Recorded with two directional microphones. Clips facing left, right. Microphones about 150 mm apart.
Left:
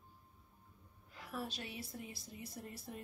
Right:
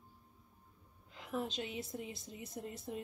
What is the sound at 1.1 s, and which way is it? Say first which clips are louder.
A woman's voice: right 5 dB; 20° right (ahead or behind).